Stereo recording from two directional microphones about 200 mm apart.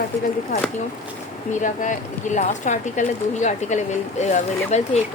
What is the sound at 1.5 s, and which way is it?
Speech, 40° left (ahead or behind).